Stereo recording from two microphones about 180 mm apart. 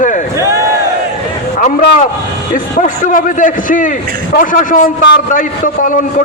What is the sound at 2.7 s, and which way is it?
A man's voice, 50° left (ahead or behind).